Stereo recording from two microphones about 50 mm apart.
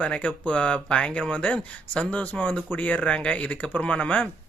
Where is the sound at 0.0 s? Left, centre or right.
Left.